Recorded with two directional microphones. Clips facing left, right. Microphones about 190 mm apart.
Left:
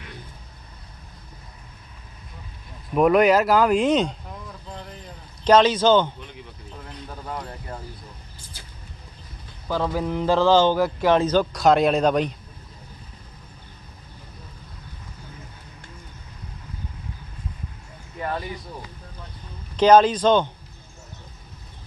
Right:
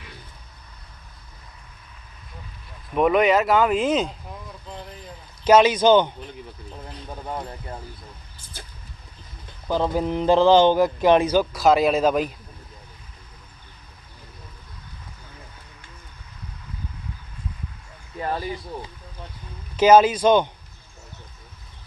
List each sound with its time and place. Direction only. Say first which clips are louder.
2.9 s speech: left 2 dB; centre (ahead or behind)
5.5 s a man's voice: right 1 dB; 10° right (ahead or behind)
8.5 s a sound: right 7 dB; 50° right (ahead or behind)
9.6 s a man's voice: right 2 dB; 20° right (ahead or behind)
19.7 s a man's voice: even; 10° right (ahead or behind)